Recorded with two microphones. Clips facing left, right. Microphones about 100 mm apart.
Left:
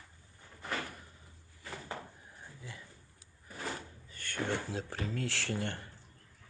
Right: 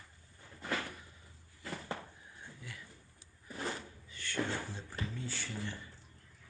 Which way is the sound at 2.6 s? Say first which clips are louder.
Left 2 dB; 30° left (ahead or behind).